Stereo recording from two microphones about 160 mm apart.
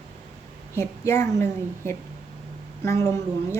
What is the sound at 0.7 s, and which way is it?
Speech, 15° left (ahead or behind).